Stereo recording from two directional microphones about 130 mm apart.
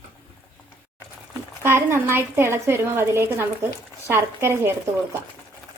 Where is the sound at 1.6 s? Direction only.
20° right (ahead or behind).